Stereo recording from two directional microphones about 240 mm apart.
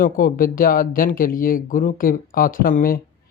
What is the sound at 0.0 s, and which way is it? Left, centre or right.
Speech, left.